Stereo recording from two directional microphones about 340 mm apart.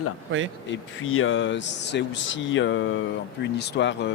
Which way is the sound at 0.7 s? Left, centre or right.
Left.